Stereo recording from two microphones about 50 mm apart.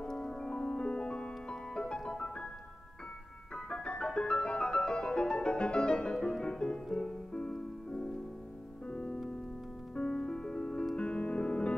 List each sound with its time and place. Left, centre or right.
0.0 s music: centre
3.5 s music: centre